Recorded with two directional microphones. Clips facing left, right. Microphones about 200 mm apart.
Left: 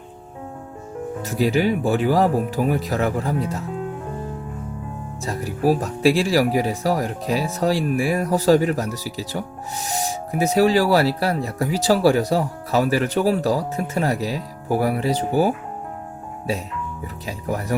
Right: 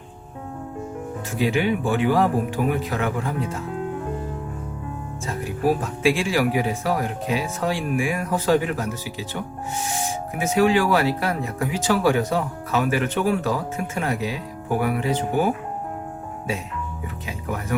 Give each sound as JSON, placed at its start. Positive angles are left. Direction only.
{"t": 1.2, "sound": "speech", "side_deg": 40}
{"t": 5.2, "sound": "speech", "side_deg": 40}
{"t": 17.2, "sound": "speech", "side_deg": 35}